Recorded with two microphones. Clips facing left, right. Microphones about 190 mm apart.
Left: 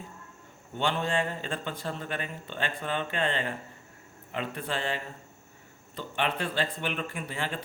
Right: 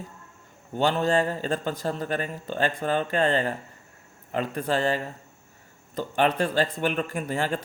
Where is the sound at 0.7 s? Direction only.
40° right (ahead or behind).